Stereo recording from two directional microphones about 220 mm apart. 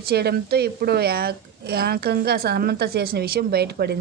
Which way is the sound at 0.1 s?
45° right (ahead or behind).